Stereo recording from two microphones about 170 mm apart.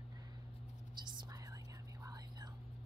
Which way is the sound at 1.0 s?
20° right (ahead or behind).